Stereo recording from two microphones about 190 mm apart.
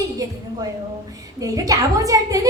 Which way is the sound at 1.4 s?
20° right (ahead or behind).